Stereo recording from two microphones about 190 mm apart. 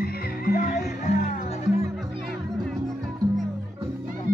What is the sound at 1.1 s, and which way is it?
Music, 35° left (ahead or behind).